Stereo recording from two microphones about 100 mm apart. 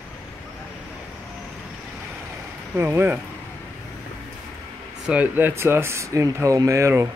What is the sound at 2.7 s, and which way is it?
Speech, 20° right (ahead or behind).